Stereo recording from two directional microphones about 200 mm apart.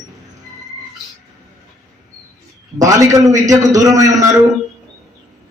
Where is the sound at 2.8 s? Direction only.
15° right (ahead or behind).